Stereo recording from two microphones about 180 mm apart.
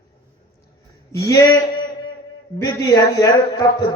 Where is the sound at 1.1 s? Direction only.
20° left (ahead or behind).